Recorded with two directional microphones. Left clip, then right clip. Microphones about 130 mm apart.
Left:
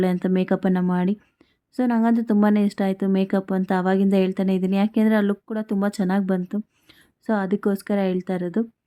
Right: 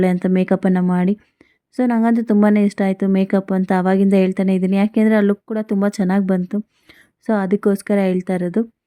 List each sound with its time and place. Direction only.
0.0 s a woman's voice: 35° right (ahead or behind)